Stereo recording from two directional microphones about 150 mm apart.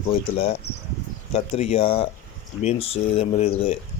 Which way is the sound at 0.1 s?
40° left (ahead or behind).